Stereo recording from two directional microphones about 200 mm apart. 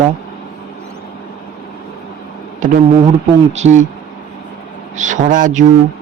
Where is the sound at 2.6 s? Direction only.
40° right (ahead or behind).